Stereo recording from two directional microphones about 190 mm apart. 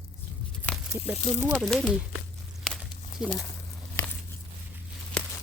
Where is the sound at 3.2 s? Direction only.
Centre (ahead or behind).